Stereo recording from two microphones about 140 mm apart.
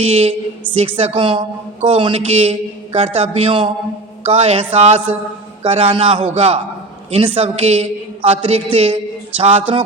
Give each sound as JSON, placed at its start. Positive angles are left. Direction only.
{"t": 0.0, "sound": "a woman's voice", "side_deg": -45}